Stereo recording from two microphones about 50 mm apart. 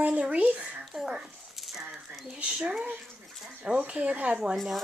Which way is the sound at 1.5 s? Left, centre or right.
Centre.